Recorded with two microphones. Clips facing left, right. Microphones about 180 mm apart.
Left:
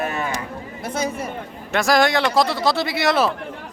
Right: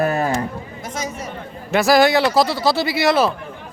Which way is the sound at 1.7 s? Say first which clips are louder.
Right 4 dB; 5° right (ahead or behind).